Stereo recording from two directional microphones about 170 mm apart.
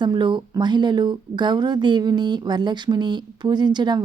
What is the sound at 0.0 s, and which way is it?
Speech, 25° right (ahead or behind).